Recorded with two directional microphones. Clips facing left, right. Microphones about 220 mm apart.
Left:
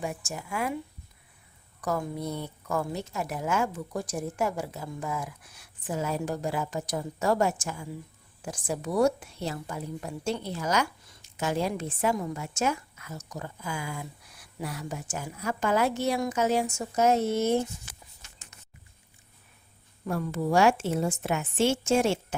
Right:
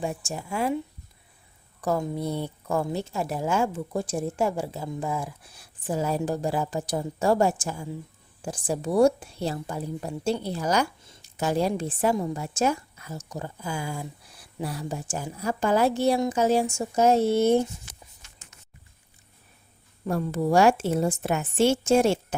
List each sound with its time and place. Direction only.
0.0 s a woman's voice: 30° right (ahead or behind)
1.8 s a woman's voice: 30° right (ahead or behind)
20.1 s a woman's voice: 35° right (ahead or behind)